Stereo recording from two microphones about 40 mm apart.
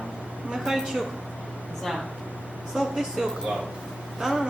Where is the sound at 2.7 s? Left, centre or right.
Centre.